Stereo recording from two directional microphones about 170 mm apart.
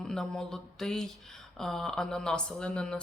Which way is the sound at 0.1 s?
5° left (ahead or behind).